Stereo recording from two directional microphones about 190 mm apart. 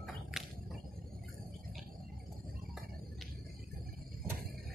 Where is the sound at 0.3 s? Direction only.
5° right (ahead or behind).